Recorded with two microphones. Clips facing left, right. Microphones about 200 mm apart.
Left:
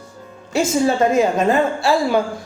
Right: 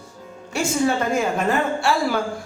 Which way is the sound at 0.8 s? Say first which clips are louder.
Left 4 dB; 25° left (ahead or behind).